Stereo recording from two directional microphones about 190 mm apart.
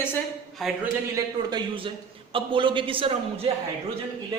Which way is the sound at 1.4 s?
20° right (ahead or behind).